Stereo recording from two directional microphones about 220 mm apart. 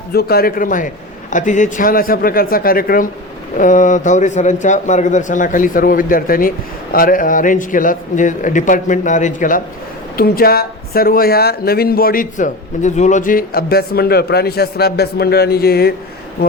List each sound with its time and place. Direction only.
0.1 s a man's voice: 45° left (ahead or behind)